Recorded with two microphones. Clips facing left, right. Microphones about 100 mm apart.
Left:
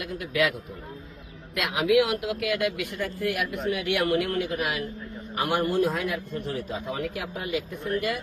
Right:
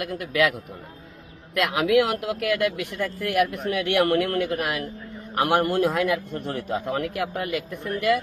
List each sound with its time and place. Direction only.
0.0 s a man's voice: 55° right (ahead or behind)
1.5 s speech: 50° right (ahead or behind)
3.2 s a man's voice: 60° right (ahead or behind)